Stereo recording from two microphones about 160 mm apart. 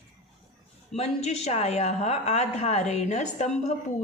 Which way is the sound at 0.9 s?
40° left (ahead or behind).